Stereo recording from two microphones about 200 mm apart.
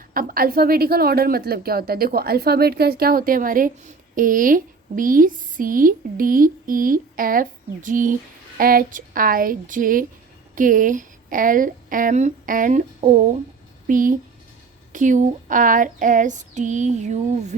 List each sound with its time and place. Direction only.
0.1 s a woman's voice: 45° right (ahead or behind)
13.8 s female singing: 40° right (ahead or behind)